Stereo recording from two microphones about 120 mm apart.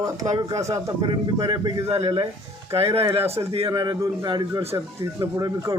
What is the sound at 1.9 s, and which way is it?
Speech, 50° right (ahead or behind).